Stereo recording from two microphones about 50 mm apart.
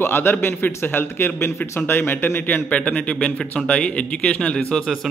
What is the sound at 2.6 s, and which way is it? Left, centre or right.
A man's voice, left.